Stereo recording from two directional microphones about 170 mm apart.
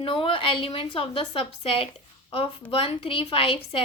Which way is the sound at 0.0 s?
30° left (ahead or behind).